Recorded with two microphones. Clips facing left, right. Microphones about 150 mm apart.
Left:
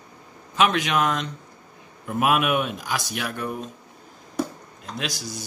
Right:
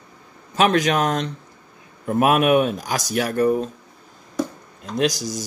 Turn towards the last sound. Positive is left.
turn(degrees=-40)  # may be behind; listen again after turning